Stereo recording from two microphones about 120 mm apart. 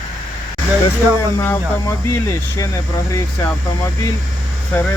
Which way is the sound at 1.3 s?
25° left (ahead or behind).